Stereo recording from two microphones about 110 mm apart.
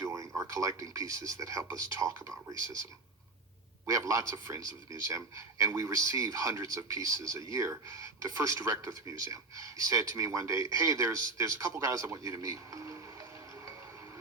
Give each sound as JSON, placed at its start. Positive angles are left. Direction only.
{"t": 0.0, "sound": "speech", "side_deg": -30}
{"t": 3.8, "sound": "speech", "side_deg": -30}